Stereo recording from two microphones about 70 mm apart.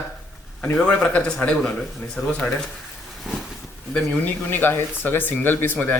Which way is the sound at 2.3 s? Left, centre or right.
Centre.